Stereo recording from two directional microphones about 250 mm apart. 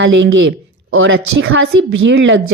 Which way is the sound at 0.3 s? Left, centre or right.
Right.